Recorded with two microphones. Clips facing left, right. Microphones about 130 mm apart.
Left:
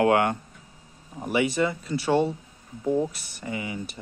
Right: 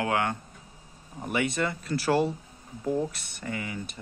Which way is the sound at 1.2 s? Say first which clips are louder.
Left 4 dB; 5° left (ahead or behind).